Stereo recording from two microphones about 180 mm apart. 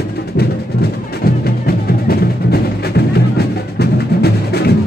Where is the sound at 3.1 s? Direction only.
65° left (ahead or behind).